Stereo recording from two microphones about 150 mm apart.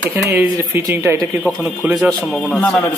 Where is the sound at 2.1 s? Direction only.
10° left (ahead or behind).